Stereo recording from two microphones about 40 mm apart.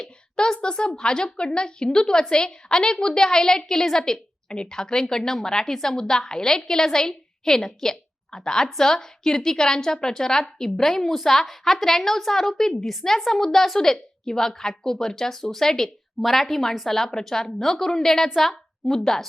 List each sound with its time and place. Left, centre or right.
0.0 s a woman's voice: centre